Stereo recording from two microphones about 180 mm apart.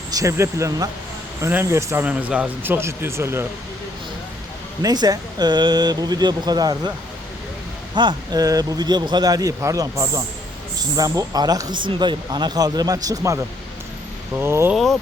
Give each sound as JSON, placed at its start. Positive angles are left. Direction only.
{"t": 0.1, "sound": "speech", "side_deg": -20}
{"t": 4.8, "sound": "speech", "side_deg": -20}
{"t": 7.9, "sound": "speech", "side_deg": -25}